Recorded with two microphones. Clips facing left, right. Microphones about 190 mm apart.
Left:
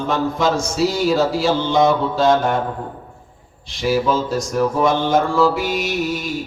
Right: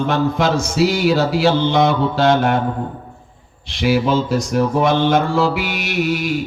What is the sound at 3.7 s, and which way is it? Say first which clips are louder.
Mantra: right 2 dB; 65° right (ahead or behind).